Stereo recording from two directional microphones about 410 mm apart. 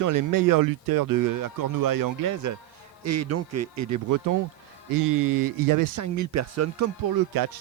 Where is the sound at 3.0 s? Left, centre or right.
Right.